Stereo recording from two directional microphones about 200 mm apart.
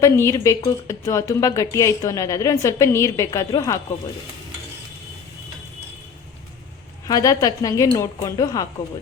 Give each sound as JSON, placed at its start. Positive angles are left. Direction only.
{"t": 0.0, "sound": "a woman's voice", "side_deg": 15}
{"t": 7.1, "sound": "a woman's voice", "side_deg": 15}